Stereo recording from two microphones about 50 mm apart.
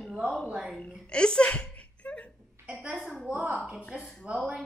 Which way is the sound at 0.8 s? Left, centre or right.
Centre.